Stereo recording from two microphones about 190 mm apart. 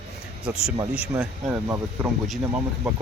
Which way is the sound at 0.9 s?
5° right (ahead or behind).